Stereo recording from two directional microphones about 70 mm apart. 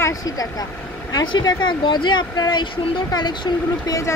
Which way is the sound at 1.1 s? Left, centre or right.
Left.